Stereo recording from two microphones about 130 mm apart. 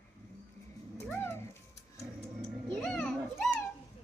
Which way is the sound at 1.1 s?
20° left (ahead or behind).